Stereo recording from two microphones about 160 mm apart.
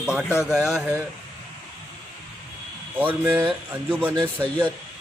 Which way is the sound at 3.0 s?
10° right (ahead or behind).